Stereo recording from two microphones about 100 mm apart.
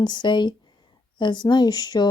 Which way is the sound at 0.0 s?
50° left (ahead or behind).